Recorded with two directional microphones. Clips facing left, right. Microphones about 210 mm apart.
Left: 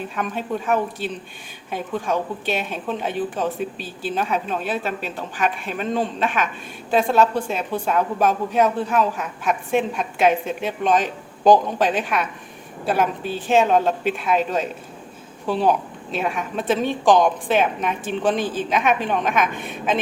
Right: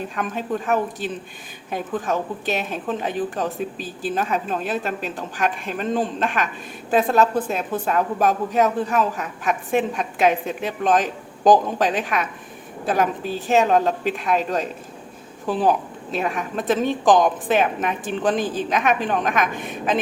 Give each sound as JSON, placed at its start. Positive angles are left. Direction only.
{"t": 0.2, "sound": "a woman's voice", "side_deg": 0}
{"t": 13.5, "sound": "a woman's voice", "side_deg": 0}
{"t": 18.3, "sound": "speech", "side_deg": -45}
{"t": 18.7, "sound": "a woman's voice", "side_deg": 0}